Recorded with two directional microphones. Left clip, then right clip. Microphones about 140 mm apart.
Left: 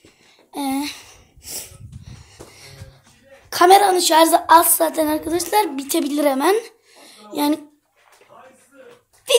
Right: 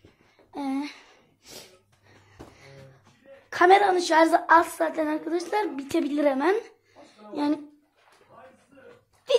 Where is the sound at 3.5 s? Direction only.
10° left (ahead or behind); by 7.6 s 30° left (ahead or behind).